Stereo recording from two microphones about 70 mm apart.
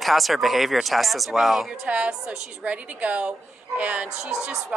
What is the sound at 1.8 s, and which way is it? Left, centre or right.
A woman's voice, centre.